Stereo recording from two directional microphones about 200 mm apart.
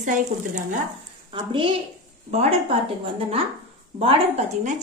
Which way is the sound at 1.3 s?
25° right (ahead or behind).